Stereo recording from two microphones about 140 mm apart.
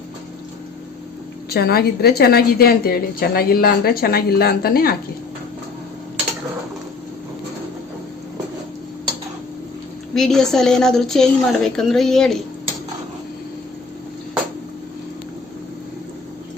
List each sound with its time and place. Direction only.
1.5 s a woman's voice: 90° left
10.2 s a woman's voice: 5° left (ahead or behind)